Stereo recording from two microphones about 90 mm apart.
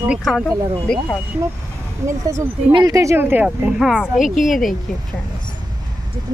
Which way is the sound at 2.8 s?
40° right (ahead or behind).